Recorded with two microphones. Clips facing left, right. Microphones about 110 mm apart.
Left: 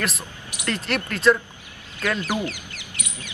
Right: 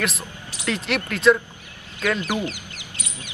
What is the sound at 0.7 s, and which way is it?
Speech, centre (ahead or behind).